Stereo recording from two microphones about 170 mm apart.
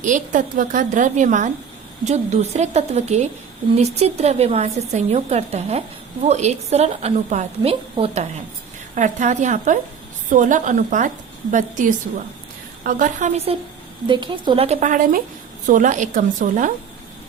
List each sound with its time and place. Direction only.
0.0 s a woman's voice: 50° right (ahead or behind)
9.0 s a woman's voice: 50° right (ahead or behind); by 14.8 s 35° right (ahead or behind)
14.8 s a woman's voice: 50° right (ahead or behind)